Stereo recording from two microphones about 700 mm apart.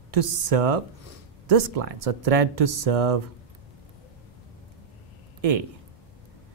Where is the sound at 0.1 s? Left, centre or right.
Right.